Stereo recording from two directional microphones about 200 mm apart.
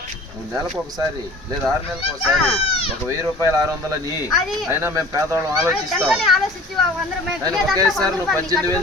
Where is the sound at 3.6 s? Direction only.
15° right (ahead or behind).